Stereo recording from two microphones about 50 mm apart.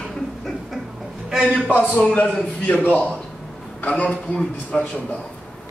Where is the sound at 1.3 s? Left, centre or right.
Centre.